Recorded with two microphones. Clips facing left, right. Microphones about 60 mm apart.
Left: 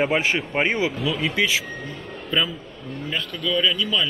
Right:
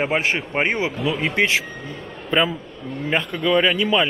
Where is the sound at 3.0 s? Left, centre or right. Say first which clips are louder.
Right 6 dB; right.